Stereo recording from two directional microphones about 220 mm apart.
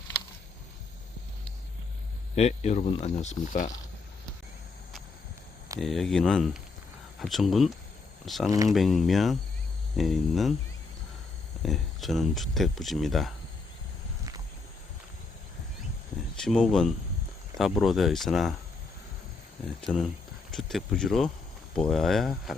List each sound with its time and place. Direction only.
2.3 s speech: 30° left (ahead or behind)
5.8 s speech: centre (ahead or behind)
11.6 s speech: centre (ahead or behind)
16.4 s speech: centre (ahead or behind)
19.8 s speech: centre (ahead or behind)